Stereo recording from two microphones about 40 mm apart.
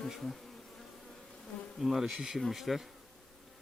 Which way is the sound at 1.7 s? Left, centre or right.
Centre.